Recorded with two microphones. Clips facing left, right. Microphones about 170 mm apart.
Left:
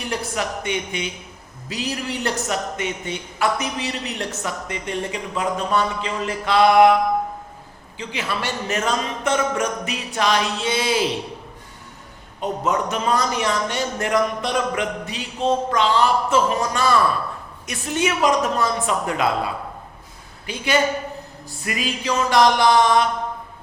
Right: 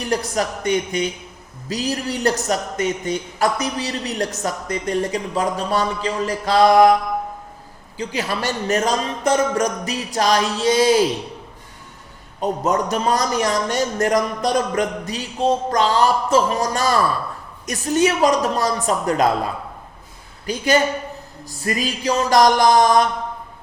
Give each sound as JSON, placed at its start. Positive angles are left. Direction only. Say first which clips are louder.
{"t": 0.0, "sound": "a man's voice", "louder": "right 4 dB", "side_deg": -40}
{"t": 7.9, "sound": "a man's voice", "louder": "right 3 dB", "side_deg": -40}
{"t": 12.4, "sound": "a man's voice", "louder": "right 2 dB", "side_deg": -40}
{"t": 20.5, "sound": "a man's voice", "louder": "right 3 dB", "side_deg": -40}